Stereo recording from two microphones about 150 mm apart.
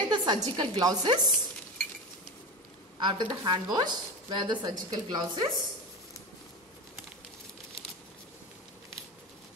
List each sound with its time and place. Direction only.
0.1 s a woman's voice: 30° right (ahead or behind)
3.0 s a woman's voice: 30° right (ahead or behind)